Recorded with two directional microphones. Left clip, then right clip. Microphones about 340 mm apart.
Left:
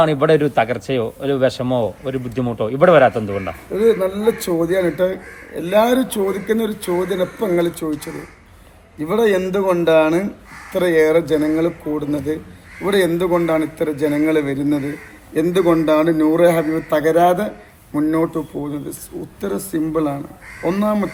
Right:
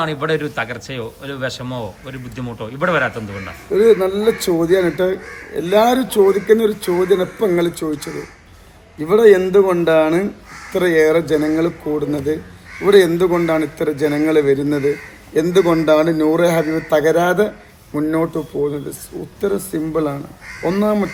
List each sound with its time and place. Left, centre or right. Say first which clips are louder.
0.0 s speech: left 5 dB; centre
3.7 s a man's voice: right 4 dB; centre